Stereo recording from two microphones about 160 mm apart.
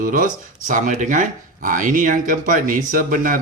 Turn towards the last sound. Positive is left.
turn(degrees=-60)  # may be behind; listen again after turning